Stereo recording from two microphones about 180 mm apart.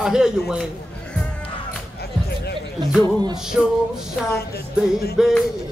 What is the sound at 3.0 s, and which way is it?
Music, 25° right (ahead or behind).